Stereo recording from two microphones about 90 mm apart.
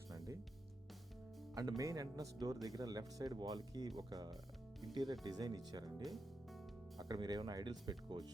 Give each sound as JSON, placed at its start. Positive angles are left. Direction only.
{"t": 1.5, "sound": "speech", "side_deg": -45}
{"t": 6.0, "sound": "music", "side_deg": 0}
{"t": 7.0, "sound": "speech", "side_deg": -45}